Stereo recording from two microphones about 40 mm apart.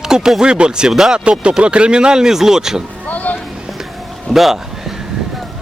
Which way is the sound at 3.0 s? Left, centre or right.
Left.